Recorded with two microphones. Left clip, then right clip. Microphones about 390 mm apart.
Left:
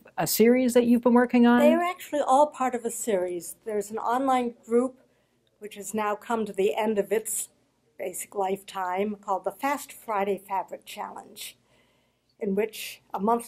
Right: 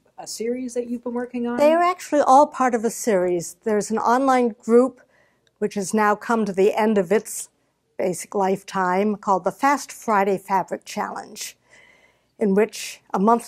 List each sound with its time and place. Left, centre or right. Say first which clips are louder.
0.1 s speech: left 6 dB; left
1.6 s a woman's voice: right 5 dB; right